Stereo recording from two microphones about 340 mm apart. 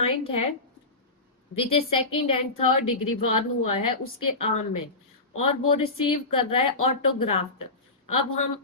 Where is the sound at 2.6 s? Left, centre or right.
Left.